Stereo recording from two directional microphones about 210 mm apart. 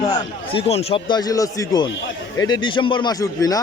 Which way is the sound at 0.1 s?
25° left (ahead or behind).